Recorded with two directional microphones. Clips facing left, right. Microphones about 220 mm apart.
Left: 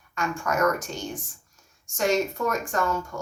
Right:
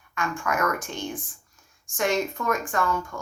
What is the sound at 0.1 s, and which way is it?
Speech, 40° left (ahead or behind).